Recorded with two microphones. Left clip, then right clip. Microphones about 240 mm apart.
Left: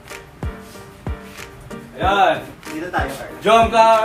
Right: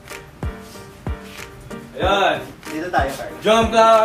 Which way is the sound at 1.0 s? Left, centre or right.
Centre.